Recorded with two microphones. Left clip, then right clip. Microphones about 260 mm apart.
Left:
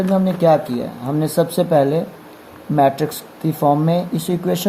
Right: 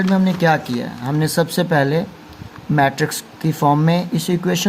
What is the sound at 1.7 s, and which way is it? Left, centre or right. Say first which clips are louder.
Speech: left 3 dB; right.